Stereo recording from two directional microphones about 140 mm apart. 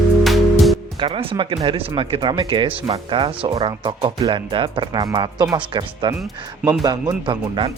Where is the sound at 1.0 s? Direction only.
40° right (ahead or behind).